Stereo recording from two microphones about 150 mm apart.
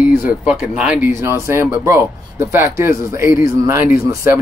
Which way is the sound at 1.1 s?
20° right (ahead or behind).